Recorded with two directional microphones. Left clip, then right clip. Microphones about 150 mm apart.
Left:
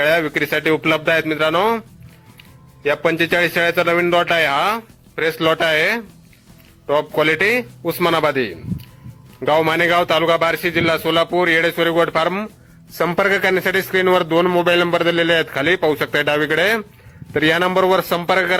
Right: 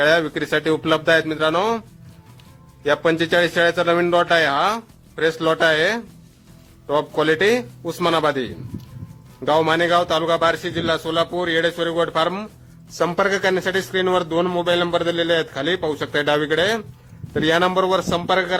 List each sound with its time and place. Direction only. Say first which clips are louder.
0.0 s speech: left 1 dB; 15° left (ahead or behind)
2.8 s a man's voice: left 1 dB; 15° left (ahead or behind)